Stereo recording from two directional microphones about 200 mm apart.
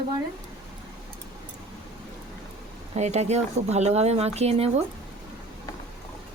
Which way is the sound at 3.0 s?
35° right (ahead or behind).